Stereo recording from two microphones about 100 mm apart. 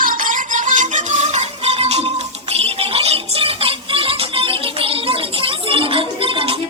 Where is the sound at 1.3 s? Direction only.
90° right.